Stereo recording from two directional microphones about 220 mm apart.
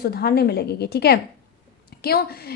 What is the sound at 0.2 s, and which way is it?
A woman's voice, 45° left (ahead or behind).